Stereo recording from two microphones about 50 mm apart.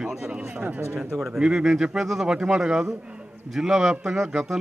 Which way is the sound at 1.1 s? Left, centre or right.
Centre.